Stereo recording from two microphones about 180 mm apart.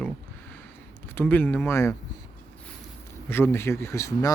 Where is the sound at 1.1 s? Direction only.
10° left (ahead or behind).